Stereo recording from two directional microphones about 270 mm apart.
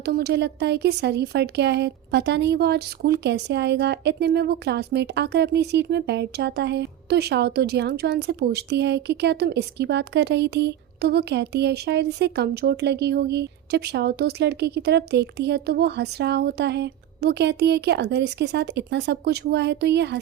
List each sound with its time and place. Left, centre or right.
0.0 s speech: right